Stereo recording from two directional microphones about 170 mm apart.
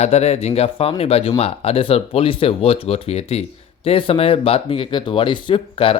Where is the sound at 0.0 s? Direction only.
35° left (ahead or behind).